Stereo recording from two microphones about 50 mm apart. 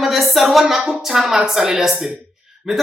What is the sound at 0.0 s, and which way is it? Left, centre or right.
Speech, centre.